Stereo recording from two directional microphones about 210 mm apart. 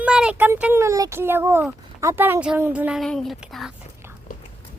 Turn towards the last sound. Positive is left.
turn(degrees=0)  # may be behind; listen again after turning